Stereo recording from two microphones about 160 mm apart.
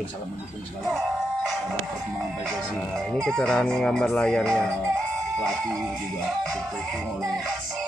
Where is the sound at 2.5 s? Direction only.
Centre (ahead or behind).